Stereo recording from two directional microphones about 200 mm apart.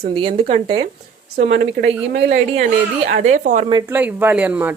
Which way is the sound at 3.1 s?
40° right (ahead or behind).